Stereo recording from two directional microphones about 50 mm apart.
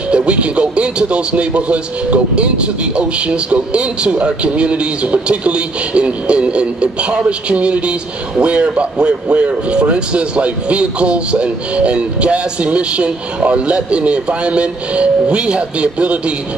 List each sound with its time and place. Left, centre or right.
0.1 s speech: right